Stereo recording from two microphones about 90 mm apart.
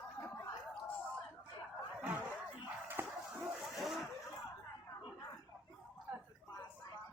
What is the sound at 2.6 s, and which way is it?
Dog, 20° right (ahead or behind).